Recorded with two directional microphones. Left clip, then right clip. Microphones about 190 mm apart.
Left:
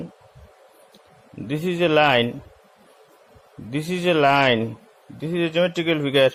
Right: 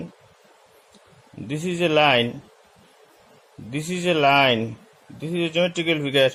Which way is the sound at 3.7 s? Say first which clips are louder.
Left 2 dB; 15° left (ahead or behind).